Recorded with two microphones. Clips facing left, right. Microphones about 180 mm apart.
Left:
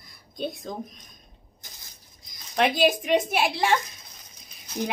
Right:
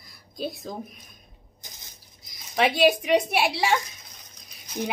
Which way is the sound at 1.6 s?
15° right (ahead or behind).